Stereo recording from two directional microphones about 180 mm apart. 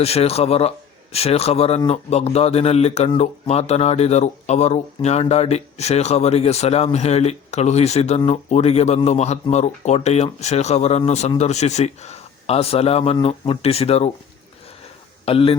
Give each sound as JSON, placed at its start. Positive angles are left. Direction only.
{"t": 0.0, "sound": "speech", "side_deg": 35}
{"t": 15.2, "sound": "speech", "side_deg": 30}